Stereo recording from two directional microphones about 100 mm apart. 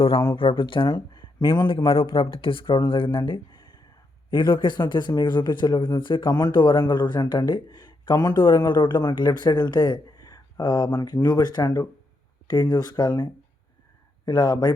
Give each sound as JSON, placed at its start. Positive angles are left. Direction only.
{"t": 0.3, "sound": "speech", "side_deg": 60}
{"t": 14.3, "sound": "speech", "side_deg": 45}